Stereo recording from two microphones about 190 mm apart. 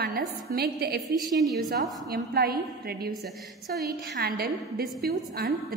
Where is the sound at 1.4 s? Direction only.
Centre (ahead or behind).